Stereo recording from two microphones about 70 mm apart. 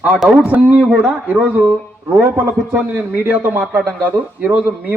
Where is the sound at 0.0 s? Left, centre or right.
Centre.